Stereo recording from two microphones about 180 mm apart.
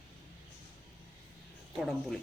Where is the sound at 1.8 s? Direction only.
Centre (ahead or behind).